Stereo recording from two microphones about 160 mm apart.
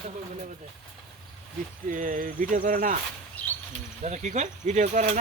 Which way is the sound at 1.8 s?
55° right (ahead or behind).